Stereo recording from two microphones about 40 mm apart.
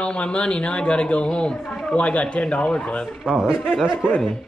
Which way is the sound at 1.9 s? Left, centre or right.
Left.